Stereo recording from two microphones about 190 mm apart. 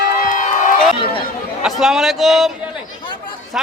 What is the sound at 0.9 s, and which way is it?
Chatter, 30° left (ahead or behind).